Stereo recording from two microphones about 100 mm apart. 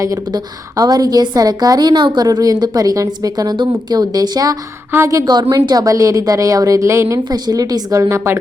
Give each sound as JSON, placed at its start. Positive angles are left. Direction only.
{"t": 0.8, "sound": "a woman's voice", "side_deg": -40}
{"t": 7.3, "sound": "a woman's voice", "side_deg": -40}